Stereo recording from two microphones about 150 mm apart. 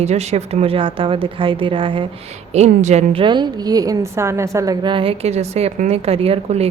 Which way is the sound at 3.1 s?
30° right (ahead or behind).